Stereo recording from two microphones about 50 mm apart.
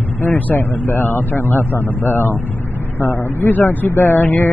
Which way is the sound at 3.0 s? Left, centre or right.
Left.